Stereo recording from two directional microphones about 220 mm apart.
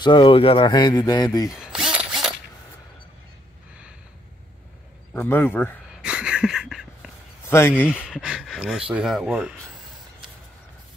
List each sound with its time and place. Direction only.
0.0 s speech: 20° left (ahead or behind)
1.5 s zipper: 5° right (ahead or behind)
5.1 s speech: 10° left (ahead or behind)
6.0 s a sound: 5° right (ahead or behind)
7.4 s speech: 10° left (ahead or behind)
7.9 s speech: centre (ahead or behind)